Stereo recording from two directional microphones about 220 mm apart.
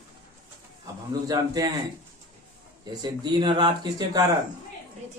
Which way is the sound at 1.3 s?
15° right (ahead or behind).